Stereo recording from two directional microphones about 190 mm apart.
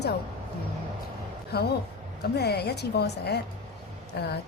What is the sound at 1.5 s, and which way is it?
A woman's voice, 55° left (ahead or behind).